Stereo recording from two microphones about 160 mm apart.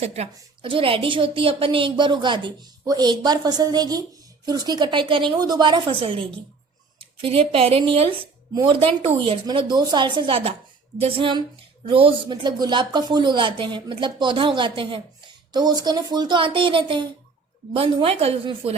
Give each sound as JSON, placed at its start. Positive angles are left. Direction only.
{"t": 0.0, "sound": "a woman's voice", "side_deg": -40}